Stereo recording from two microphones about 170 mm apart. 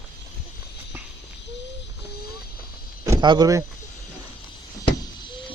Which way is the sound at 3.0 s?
20° right (ahead or behind).